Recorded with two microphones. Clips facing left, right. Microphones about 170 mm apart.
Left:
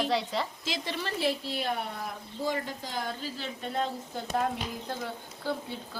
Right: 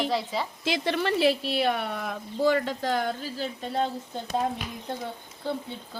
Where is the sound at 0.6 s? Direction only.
65° right (ahead or behind).